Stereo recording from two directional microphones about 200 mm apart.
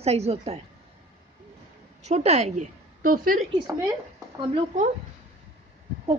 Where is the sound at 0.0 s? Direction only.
30° right (ahead or behind).